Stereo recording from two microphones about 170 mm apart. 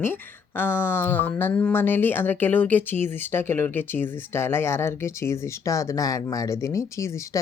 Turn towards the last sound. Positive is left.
turn(degrees=15)  # may be behind; listen again after turning